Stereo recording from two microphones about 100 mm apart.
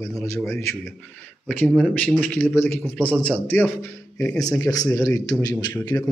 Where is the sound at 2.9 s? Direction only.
10° left (ahead or behind).